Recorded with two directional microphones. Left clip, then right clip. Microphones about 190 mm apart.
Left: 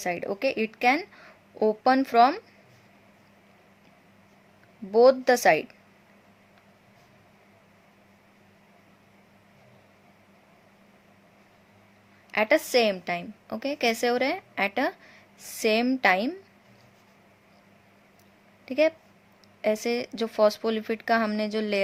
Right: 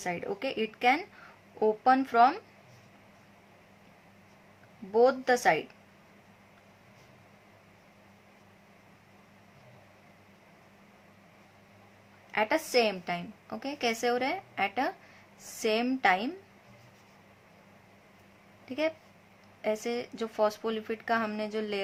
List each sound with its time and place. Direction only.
0.0 s speech: 30° left (ahead or behind)
4.9 s speech: 30° left (ahead or behind)
12.3 s a woman's voice: 30° left (ahead or behind)
18.6 s a woman's voice: 30° left (ahead or behind)